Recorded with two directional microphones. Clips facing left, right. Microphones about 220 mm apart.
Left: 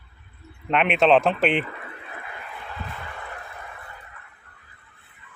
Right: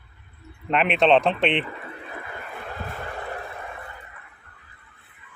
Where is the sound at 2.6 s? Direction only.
45° right (ahead or behind).